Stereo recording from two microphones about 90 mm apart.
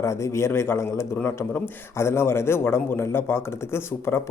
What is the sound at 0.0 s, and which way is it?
A man's voice, 35° left (ahead or behind).